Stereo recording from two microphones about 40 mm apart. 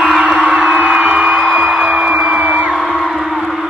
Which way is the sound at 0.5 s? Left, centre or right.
Right.